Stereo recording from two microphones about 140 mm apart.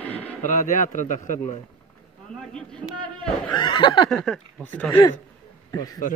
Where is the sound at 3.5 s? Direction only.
35° left (ahead or behind).